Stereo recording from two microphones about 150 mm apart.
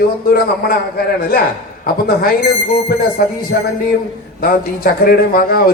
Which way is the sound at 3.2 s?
90° left.